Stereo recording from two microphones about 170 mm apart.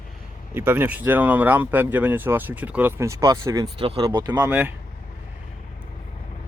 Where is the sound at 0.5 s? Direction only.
10° right (ahead or behind).